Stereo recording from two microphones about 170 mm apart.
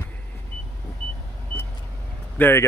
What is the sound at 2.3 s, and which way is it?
Speech, 10° left (ahead or behind).